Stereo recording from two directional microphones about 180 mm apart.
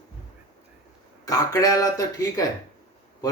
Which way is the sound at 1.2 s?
20° left (ahead or behind).